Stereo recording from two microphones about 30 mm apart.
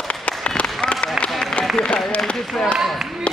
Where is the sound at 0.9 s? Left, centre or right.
Left.